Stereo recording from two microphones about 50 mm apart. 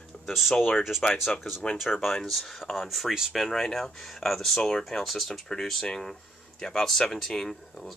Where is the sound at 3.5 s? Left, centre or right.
Centre.